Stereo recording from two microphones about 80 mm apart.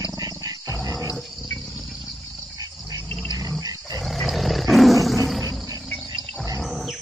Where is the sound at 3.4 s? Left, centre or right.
Right.